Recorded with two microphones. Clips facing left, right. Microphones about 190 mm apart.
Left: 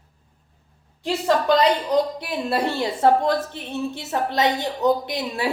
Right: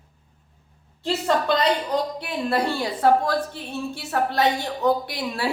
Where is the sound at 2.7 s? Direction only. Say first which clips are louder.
Left 2 dB; 25° left (ahead or behind).